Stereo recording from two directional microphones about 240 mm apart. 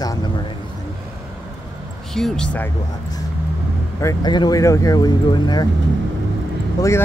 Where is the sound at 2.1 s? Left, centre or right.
Centre.